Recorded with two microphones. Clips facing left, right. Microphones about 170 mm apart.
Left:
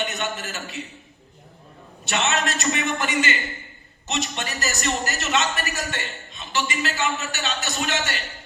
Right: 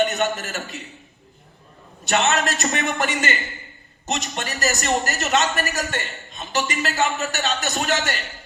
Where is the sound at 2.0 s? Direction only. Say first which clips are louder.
Right 4 dB; 40° right (ahead or behind).